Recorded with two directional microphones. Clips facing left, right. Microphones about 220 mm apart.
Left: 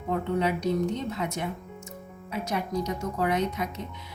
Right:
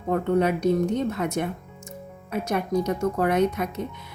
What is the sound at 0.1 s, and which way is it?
Speech, 50° right (ahead or behind).